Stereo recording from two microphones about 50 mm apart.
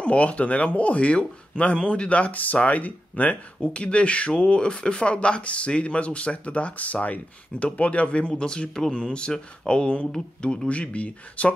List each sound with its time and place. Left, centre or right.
0.0 s speech: left
3.6 s speech: left